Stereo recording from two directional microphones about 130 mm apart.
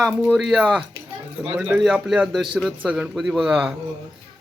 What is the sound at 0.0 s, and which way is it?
A man's voice, centre (ahead or behind).